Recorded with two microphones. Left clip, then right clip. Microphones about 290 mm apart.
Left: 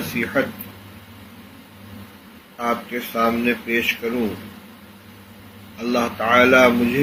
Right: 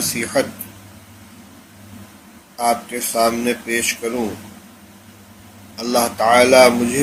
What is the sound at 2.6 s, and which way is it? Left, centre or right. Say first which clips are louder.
A man's voice: right 4 dB; right.